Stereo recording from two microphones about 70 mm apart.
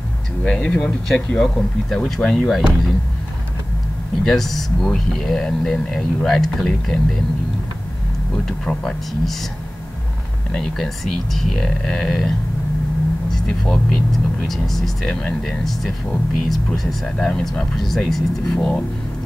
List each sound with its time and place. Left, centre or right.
0.4 s speech: centre
4.2 s speech: centre
8.5 s speech: centre
10.5 s speech: centre
13.7 s speech: centre